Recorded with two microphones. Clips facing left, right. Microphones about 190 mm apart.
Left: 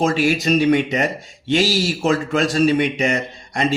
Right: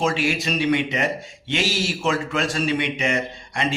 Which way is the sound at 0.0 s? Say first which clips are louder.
Left 5 dB; 40° left (ahead or behind).